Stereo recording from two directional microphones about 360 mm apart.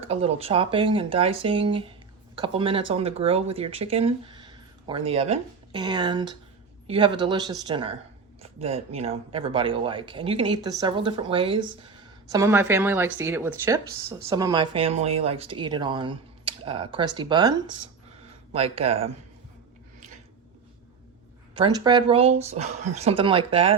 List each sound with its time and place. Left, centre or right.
0.0 s speech: centre
18.5 s speech: centre
21.5 s speech: centre